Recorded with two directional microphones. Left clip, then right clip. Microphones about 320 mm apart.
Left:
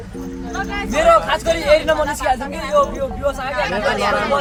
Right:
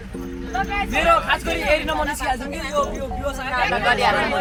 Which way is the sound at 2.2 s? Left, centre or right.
Centre.